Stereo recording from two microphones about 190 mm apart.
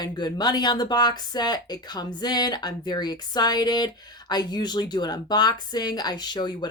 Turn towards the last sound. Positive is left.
turn(degrees=20)  # may be behind; listen again after turning